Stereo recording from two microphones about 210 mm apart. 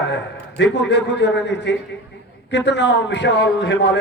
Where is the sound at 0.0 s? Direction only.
55° left (ahead or behind).